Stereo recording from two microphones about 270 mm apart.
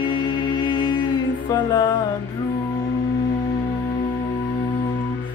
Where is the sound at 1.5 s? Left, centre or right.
Centre.